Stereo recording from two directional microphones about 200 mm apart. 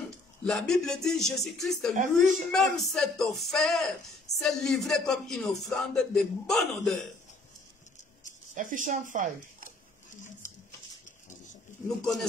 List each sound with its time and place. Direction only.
0.4 s a man's voice: centre (ahead or behind)
8.5 s speech: 40° right (ahead or behind)
12.0 s a man's voice: centre (ahead or behind)